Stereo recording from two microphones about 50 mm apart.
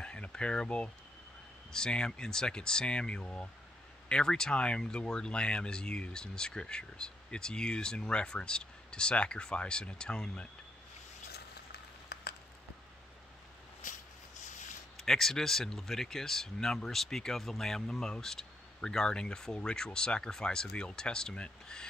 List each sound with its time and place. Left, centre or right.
0.0 s a sound: centre
1.7 s speech: centre
15.0 s speech: centre